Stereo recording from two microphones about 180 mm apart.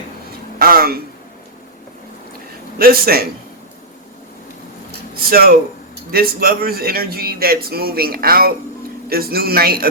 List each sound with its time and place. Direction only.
0.6 s a sound: 55° right (ahead or behind)
2.7 s a man's voice: 55° right (ahead or behind)
5.1 s a man's voice: 55° right (ahead or behind)